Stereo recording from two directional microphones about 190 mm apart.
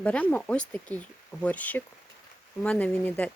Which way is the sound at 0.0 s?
5° left (ahead or behind).